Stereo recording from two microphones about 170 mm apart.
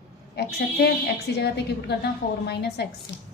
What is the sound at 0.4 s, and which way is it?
A woman's voice, 70° left (ahead or behind).